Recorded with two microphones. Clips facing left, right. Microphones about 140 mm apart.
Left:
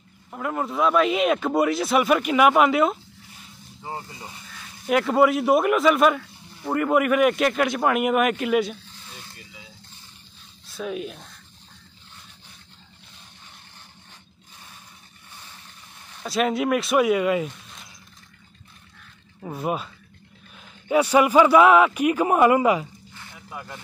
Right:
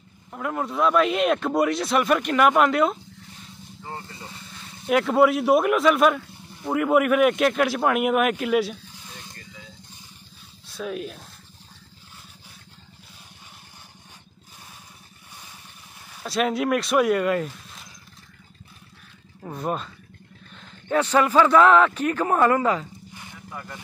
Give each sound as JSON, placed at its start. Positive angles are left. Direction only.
{"t": 0.3, "sound": "speech", "side_deg": 0}
{"t": 3.8, "sound": "a man's voice", "side_deg": 15}
{"t": 4.8, "sound": "speech", "side_deg": 0}
{"t": 8.8, "sound": "a sound", "side_deg": -10}
{"t": 9.3, "sound": "vehicle", "side_deg": 15}
{"t": 10.7, "sound": "speech", "side_deg": 0}
{"t": 16.2, "sound": "speech", "side_deg": 0}
{"t": 19.4, "sound": "a man's voice", "side_deg": 5}